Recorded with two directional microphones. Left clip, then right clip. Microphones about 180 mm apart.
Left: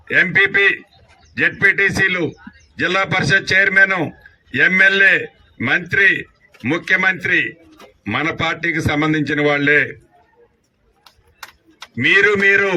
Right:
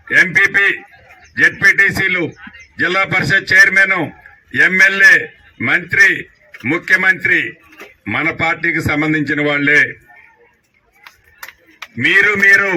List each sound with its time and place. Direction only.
0.1 s a man's voice: 30° left (ahead or behind)
12.0 s a man's voice: 30° left (ahead or behind)